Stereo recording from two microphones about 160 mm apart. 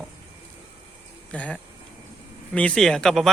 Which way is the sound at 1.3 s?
10° left (ahead or behind).